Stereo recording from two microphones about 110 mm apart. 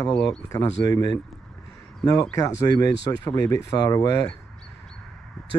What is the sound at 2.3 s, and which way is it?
Speech, 30° left (ahead or behind).